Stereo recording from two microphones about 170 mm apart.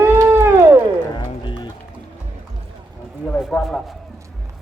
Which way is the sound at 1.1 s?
25° left (ahead or behind).